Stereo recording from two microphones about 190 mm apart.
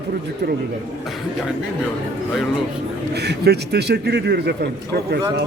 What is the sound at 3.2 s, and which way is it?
A man's voice, 60° right (ahead or behind).